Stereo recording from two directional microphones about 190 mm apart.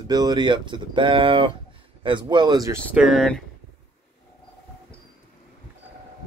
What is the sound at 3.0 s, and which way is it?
Speech, centre (ahead or behind).